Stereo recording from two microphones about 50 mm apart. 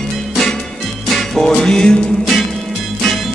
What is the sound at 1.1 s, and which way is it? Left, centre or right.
Music, centre.